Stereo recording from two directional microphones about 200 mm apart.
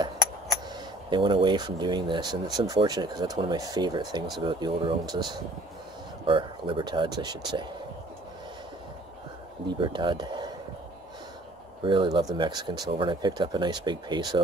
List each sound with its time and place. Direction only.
1.1 s speech: 25° right (ahead or behind)
9.7 s speech: 25° right (ahead or behind)
11.8 s speech: 25° right (ahead or behind)